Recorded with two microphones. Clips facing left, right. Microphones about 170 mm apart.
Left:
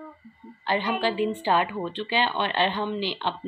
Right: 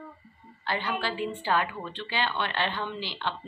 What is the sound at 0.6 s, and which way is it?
A woman's voice, 15° left (ahead or behind).